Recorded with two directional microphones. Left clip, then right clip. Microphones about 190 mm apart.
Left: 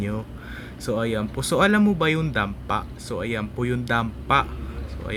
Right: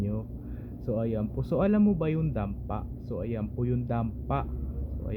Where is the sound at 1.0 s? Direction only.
25° left (ahead or behind).